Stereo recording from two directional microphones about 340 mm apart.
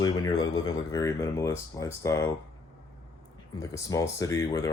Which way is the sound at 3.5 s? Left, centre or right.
Centre.